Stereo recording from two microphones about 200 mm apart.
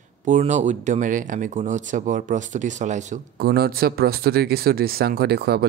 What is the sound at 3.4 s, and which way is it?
Speech, 50° right (ahead or behind).